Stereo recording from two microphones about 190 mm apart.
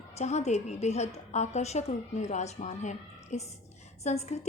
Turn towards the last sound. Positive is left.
turn(degrees=35)  # may be behind; listen again after turning